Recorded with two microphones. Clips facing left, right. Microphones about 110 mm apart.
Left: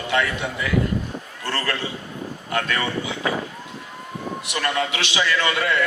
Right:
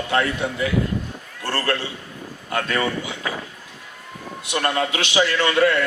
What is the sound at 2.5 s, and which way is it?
Speech, 30° right (ahead or behind).